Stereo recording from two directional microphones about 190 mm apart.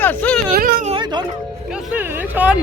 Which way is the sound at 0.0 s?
10° left (ahead or behind).